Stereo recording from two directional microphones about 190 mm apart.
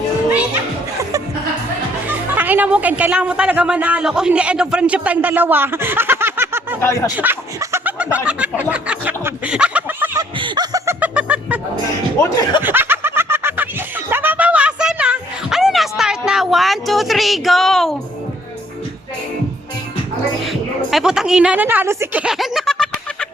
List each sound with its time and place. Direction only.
2.0 s speech: 10° right (ahead or behind)
6.8 s speech: 15° left (ahead or behind)
7.1 s snicker: 10° right (ahead or behind)
10.2 s laughter: 25° right (ahead or behind)
11.0 s music: 5° right (ahead or behind)
12.6 s snicker: 10° right (ahead or behind)
20.5 s a woman's voice: centre (ahead or behind)